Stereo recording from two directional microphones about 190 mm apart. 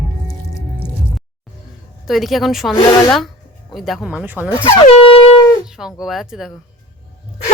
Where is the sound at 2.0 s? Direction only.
Centre (ahead or behind).